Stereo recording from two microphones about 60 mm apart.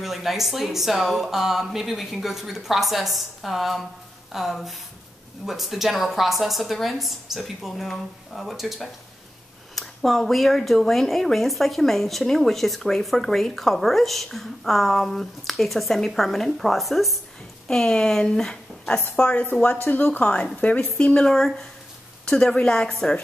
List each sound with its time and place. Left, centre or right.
0.0 s speech: centre
17.6 s a woman's voice: centre
19.8 s speech: left
21.3 s a woman's voice: centre